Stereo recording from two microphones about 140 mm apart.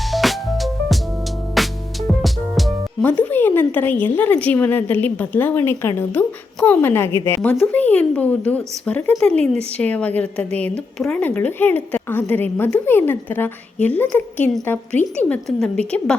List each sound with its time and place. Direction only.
0.1 s music: centre (ahead or behind)
3.0 s a woman's voice: 10° left (ahead or behind)